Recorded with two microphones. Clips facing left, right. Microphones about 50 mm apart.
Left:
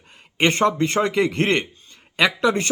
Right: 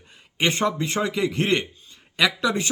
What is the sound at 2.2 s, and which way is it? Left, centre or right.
Speech, left.